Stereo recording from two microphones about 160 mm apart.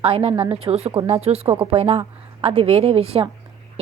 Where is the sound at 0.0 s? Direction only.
35° right (ahead or behind).